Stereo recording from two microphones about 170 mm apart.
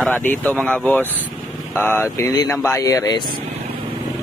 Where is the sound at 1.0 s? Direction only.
10° right (ahead or behind).